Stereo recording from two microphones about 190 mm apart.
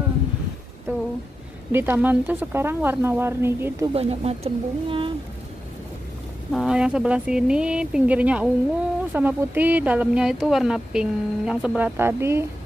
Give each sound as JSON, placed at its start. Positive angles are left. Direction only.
{"t": 0.9, "sound": "a sound", "side_deg": -10}
{"t": 1.7, "sound": "speech", "side_deg": -10}
{"t": 3.9, "sound": "speech", "side_deg": -30}
{"t": 6.5, "sound": "speech", "side_deg": -5}